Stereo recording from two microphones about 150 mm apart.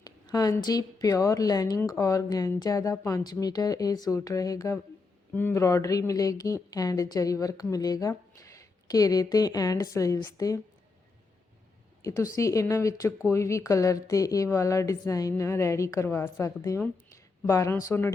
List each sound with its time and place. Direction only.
0.0 s a woman's voice: 25° left (ahead or behind)
12.0 s a woman's voice: 20° left (ahead or behind)